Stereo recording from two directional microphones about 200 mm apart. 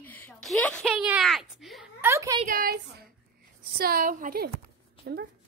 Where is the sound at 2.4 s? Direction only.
45° right (ahead or behind).